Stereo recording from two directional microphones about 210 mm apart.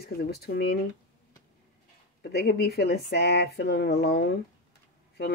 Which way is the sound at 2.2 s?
50° left (ahead or behind).